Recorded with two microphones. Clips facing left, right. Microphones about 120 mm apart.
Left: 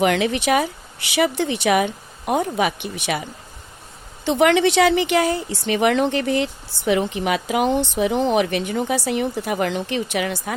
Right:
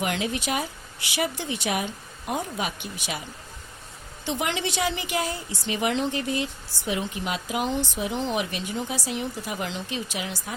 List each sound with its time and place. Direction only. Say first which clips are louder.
0.0 s a woman's voice: left 9 dB; 75° left (ahead or behind)